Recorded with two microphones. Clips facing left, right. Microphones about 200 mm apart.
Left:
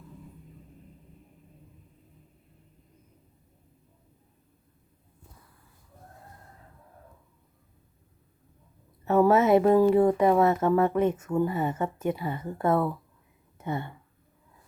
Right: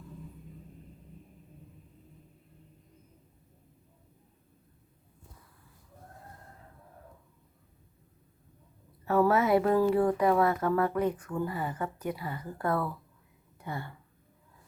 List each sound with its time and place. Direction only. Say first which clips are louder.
9.0 s speech: left 4 dB; 20° left (ahead or behind)